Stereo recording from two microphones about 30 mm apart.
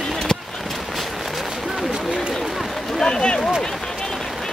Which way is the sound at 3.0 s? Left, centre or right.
Left.